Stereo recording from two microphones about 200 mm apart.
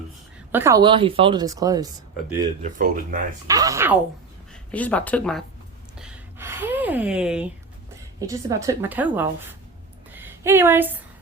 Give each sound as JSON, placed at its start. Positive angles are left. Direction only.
{"t": 0.5, "sound": "speech", "side_deg": -15}
{"t": 2.6, "sound": "speech", "side_deg": -40}
{"t": 3.4, "sound": "a woman's voice", "side_deg": -15}
{"t": 4.7, "sound": "speech", "side_deg": 5}
{"t": 6.0, "sound": "a sound", "side_deg": -10}
{"t": 8.3, "sound": "a woman's voice", "side_deg": -15}
{"t": 10.1, "sound": "a sound", "side_deg": -10}